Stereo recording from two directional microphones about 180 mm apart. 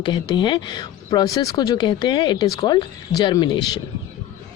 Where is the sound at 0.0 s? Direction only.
25° left (ahead or behind).